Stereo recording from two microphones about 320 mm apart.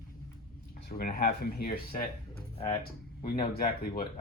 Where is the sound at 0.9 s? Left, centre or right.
Left.